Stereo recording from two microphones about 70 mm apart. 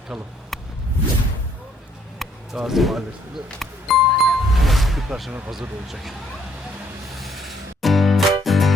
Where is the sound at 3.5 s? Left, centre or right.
Centre.